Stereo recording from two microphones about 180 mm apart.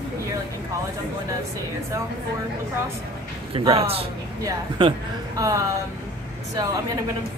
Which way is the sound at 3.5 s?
30° right (ahead or behind).